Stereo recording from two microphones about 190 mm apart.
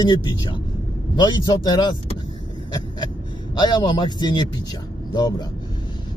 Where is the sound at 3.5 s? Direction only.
20° left (ahead or behind).